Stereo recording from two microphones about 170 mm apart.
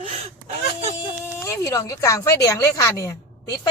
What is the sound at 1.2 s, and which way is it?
Speech, 15° left (ahead or behind).